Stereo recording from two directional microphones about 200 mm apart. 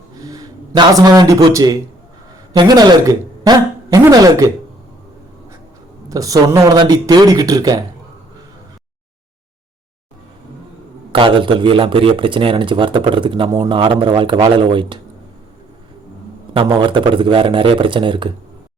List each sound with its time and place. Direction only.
0.3 s a man's voice: 20° right (ahead or behind)
6.1 s speech: 15° right (ahead or behind)
11.1 s speech: 25° right (ahead or behind)
16.6 s speech: 25° right (ahead or behind)